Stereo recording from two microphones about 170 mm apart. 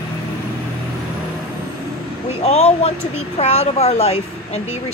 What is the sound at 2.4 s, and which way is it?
Speech, 40° left (ahead or behind).